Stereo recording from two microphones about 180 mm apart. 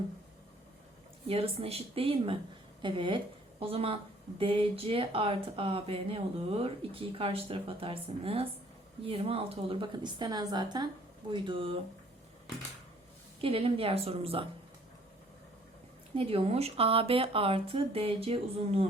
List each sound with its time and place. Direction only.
1.3 s a woman's voice: 35° right (ahead or behind)
13.4 s speech: 30° right (ahead or behind)
16.1 s speech: 30° right (ahead or behind)